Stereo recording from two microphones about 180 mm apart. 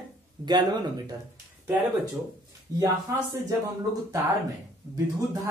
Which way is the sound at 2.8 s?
20° right (ahead or behind).